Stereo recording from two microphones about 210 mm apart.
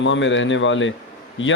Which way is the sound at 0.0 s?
60° left (ahead or behind).